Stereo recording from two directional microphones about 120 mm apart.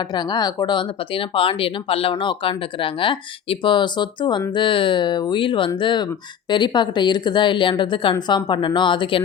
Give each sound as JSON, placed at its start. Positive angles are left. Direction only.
{"t": 0.0, "sound": "a woman's voice", "side_deg": 40}